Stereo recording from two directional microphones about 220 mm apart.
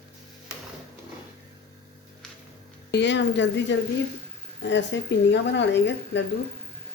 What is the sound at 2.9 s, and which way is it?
A woman's voice, 55° left (ahead or behind).